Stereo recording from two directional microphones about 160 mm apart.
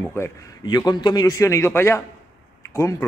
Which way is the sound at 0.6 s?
25° left (ahead or behind).